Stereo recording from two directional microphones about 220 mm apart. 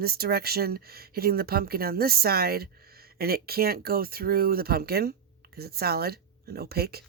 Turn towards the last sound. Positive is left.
turn(degrees=-45)  # may be behind; listen again after turning